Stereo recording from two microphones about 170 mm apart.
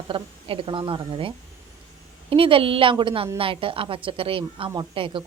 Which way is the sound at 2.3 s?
30° right (ahead or behind).